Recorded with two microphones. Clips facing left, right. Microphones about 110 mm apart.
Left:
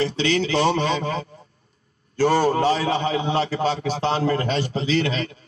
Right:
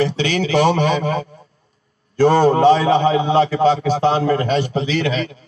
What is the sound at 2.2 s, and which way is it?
A man's voice, 25° right (ahead or behind).